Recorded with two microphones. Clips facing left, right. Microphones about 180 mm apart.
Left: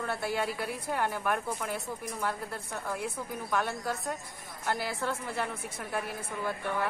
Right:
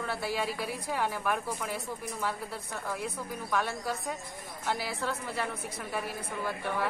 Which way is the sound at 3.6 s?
5° right (ahead or behind).